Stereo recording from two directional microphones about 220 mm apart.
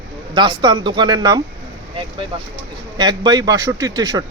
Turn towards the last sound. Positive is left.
turn(degrees=-20)  # may be behind; listen again after turning